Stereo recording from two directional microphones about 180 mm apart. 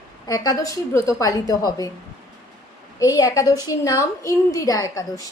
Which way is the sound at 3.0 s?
20° left (ahead or behind).